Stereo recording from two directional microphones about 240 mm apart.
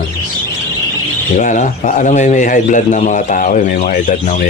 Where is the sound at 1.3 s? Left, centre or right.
Left.